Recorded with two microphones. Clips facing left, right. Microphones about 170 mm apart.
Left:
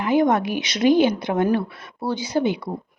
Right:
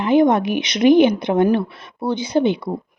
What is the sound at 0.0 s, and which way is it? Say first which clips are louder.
A woman's voice: right 4 dB; 20° right (ahead or behind).